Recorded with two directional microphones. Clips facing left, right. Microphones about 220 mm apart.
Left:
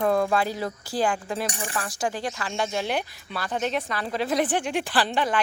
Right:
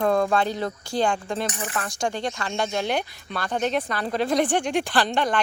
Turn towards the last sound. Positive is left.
turn(degrees=5)  # may be behind; listen again after turning